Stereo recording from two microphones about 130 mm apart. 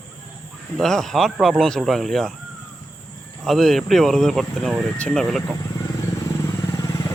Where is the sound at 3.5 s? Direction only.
Centre (ahead or behind).